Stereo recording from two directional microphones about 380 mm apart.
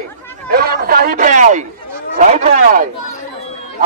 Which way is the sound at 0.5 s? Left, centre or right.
Right.